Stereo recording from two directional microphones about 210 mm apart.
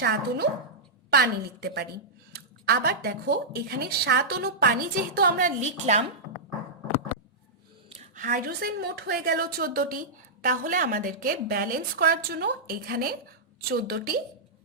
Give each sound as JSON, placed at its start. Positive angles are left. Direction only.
{"t": 0.0, "sound": "a woman's voice", "side_deg": -50}
{"t": 7.9, "sound": "a woman's voice", "side_deg": -40}